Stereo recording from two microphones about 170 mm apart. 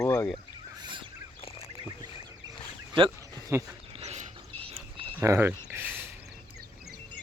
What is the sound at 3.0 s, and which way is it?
Speech, 30° right (ahead or behind).